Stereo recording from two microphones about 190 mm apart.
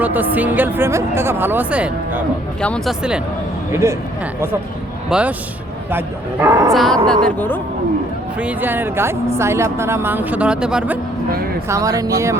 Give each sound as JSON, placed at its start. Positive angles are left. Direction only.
{"t": 0.0, "sound": "speech", "side_deg": -10}
{"t": 2.6, "sound": "speech", "side_deg": 5}
{"t": 3.7, "sound": "speech", "side_deg": -15}
{"t": 5.0, "sound": "a man's voice", "side_deg": -5}
{"t": 6.4, "sound": "speech", "side_deg": -15}
{"t": 6.7, "sound": "speech", "side_deg": 0}
{"t": 8.4, "sound": "speech", "side_deg": -10}
{"t": 11.7, "sound": "speech", "side_deg": -15}